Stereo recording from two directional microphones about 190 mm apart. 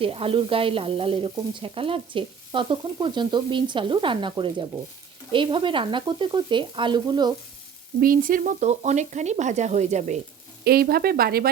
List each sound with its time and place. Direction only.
0.0 s speech: 30° right (ahead or behind)
8.0 s sizzle: 50° right (ahead or behind)
10.6 s speech: 55° right (ahead or behind)